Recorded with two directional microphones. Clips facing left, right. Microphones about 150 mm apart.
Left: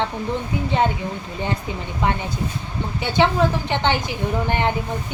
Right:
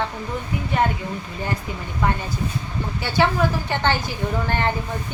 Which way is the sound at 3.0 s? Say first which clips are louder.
Left 2 dB; 20° left (ahead or behind).